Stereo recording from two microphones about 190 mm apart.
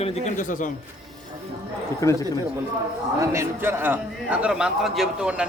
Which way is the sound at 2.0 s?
15° left (ahead or behind).